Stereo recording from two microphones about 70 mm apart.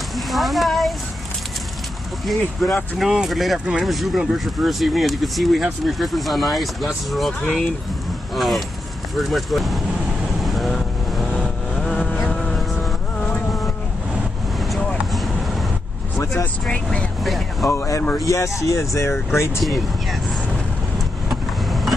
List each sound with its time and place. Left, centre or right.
0.1 s a sound: centre
2.2 s speech: centre
10.4 s vehicle: centre
15.1 s vehicle: centre
16.6 s speech: centre
17.2 s speech: centre
17.6 s speech: left
21.3 s vehicle: centre